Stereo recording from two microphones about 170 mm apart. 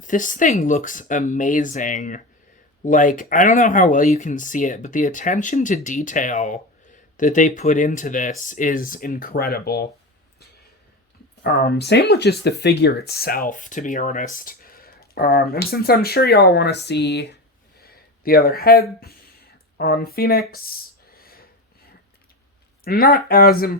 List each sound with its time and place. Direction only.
0.0 s speech: 50° left (ahead or behind); by 9.9 s 65° left (ahead or behind)
11.4 s speech: 70° left (ahead or behind)
17.7 s a sound: 60° left (ahead or behind)
22.8 s speech: 65° left (ahead or behind)